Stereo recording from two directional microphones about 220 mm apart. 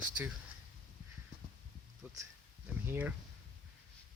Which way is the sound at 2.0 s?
10° right (ahead or behind).